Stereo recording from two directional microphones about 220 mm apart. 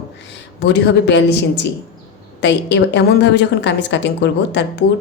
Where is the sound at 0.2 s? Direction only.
50° left (ahead or behind).